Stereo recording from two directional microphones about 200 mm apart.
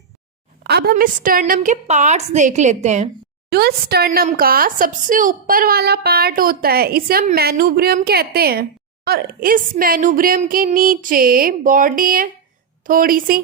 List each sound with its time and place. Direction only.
0.6 s a woman's voice: 50° right (ahead or behind)
3.5 s a woman's voice: 50° right (ahead or behind)